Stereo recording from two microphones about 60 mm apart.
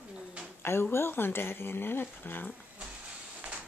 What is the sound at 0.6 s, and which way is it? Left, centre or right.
Speech, left.